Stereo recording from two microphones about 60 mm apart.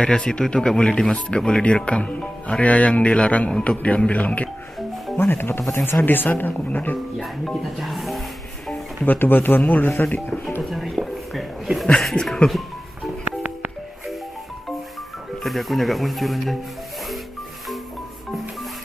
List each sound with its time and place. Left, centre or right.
0.0 s speech: centre
5.1 s speech: left
7.2 s speech: centre
9.0 s speech: left
10.6 s speech: centre
15.4 s speech: centre